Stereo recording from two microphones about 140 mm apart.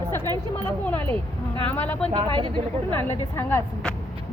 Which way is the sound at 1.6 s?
10° left (ahead or behind).